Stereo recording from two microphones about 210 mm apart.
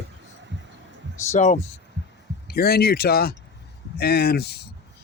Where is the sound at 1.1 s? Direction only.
35° left (ahead or behind).